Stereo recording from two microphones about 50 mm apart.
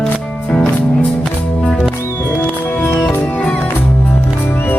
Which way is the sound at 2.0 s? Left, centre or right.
Left.